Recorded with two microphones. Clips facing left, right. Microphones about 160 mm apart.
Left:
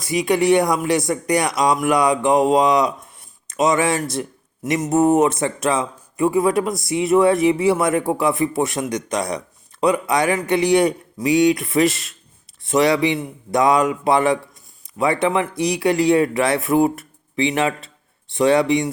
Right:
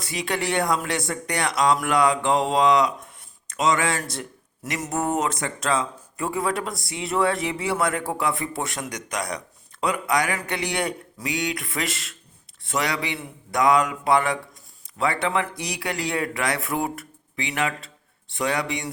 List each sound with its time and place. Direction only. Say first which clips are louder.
0.0 s speech: left 9 dB; 20° left (ahead or behind)